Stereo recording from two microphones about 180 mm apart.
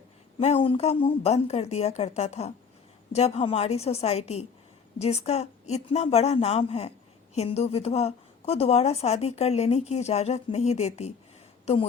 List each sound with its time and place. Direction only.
0.3 s a woman's voice: 35° left (ahead or behind)